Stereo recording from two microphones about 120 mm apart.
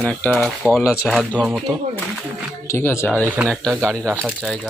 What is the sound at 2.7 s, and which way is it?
Speech, 20° left (ahead or behind).